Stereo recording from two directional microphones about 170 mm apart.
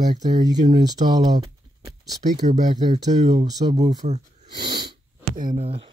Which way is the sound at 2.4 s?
45° right (ahead or behind).